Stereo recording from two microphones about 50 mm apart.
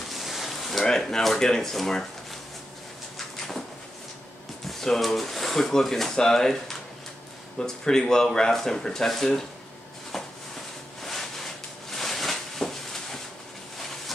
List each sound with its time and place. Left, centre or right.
0.1 s speech: centre
4.6 s speech: centre
10.1 s a sound: centre